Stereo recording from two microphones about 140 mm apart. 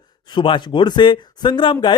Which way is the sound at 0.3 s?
35° left (ahead or behind).